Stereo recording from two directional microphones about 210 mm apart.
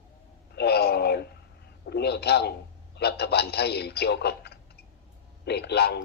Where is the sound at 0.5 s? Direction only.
50° left (ahead or behind).